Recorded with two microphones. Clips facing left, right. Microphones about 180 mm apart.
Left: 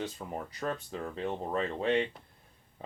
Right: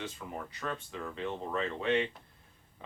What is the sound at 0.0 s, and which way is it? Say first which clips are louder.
Speech: left 3 dB; 35° left (ahead or behind).